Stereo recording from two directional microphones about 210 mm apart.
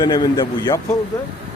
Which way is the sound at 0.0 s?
20° left (ahead or behind).